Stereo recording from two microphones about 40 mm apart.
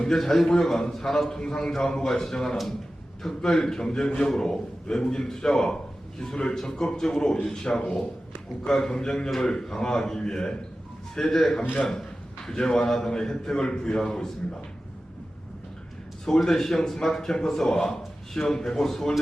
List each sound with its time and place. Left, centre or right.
0.2 s a man's voice: centre
16.2 s a man's voice: centre